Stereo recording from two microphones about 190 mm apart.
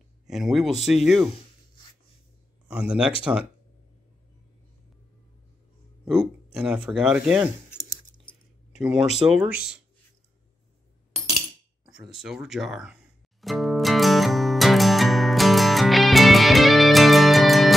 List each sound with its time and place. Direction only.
0.3 s speech: centre (ahead or behind)
2.7 s speech: 5° right (ahead or behind)
6.0 s speech: 5° right (ahead or behind)
7.7 s chewing: 20° left (ahead or behind)
8.7 s speech: 5° right (ahead or behind)
12.1 s music: 5° right (ahead or behind)